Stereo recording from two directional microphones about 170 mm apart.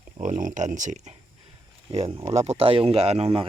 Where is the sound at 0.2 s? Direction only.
50° right (ahead or behind).